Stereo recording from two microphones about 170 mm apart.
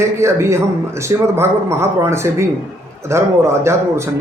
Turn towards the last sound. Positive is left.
turn(degrees=-15)  # may be behind; listen again after turning